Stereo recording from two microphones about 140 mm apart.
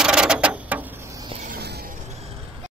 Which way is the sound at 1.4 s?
90° right.